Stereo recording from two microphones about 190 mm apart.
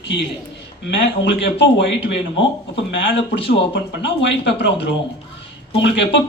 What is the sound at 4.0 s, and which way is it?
Speech, 70° left (ahead or behind).